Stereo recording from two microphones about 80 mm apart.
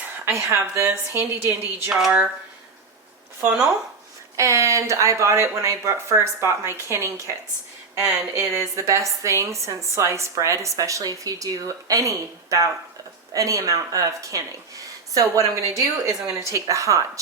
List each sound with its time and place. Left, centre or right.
0.3 s speech: right
1.9 s speech: centre
4.4 s speech: right